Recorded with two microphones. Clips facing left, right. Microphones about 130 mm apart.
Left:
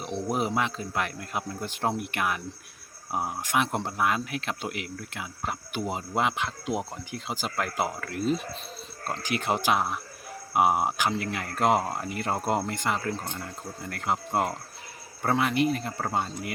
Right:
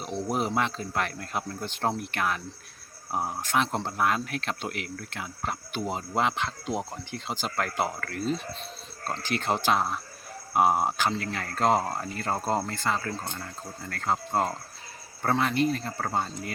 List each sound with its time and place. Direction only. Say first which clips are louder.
0.0 s speech: even; centre (ahead or behind)